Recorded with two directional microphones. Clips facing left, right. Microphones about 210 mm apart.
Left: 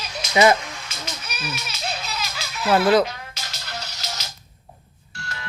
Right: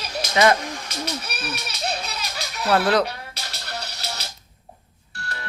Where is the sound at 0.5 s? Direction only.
35° right (ahead or behind).